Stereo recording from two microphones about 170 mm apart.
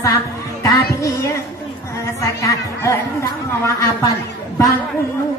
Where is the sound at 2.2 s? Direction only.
20° left (ahead or behind).